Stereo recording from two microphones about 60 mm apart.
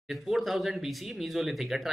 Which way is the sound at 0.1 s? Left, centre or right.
Centre.